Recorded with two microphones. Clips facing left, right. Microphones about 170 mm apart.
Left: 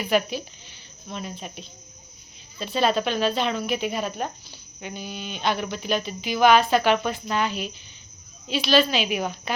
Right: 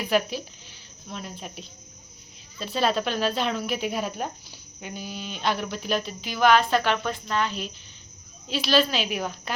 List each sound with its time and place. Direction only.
0.0 s speech: centre (ahead or behind)